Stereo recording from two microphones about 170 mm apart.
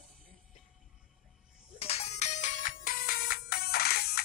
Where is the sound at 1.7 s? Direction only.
35° left (ahead or behind).